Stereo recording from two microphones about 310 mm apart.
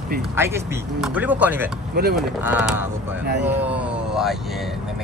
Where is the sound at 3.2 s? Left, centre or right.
Right.